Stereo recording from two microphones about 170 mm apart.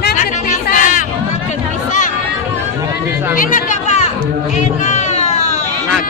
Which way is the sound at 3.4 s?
50° left (ahead or behind).